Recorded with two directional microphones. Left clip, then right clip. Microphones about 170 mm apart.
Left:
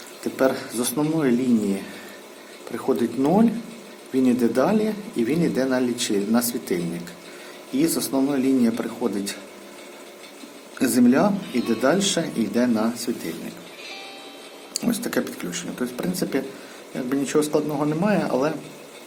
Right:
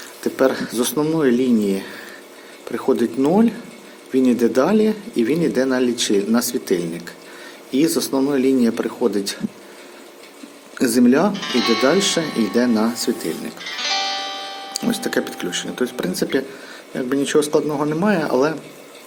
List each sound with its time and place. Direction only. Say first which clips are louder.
0.3 s speech: right 4 dB; 15° right (ahead or behind)
10.8 s speech: right 3 dB; 15° right (ahead or behind)
11.5 s speech: right 7 dB; 60° right (ahead or behind)
11.8 s speech: right 4 dB; 15° right (ahead or behind)
13.8 s music: right 17 dB; 60° right (ahead or behind)
14.7 s speech: right 3 dB; 10° right (ahead or behind)